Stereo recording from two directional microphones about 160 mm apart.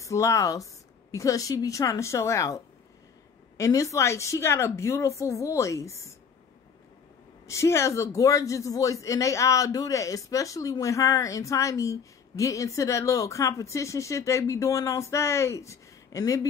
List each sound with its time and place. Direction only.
0.0 s a man's voice: 20° left (ahead or behind)
7.4 s a man's voice: 20° left (ahead or behind)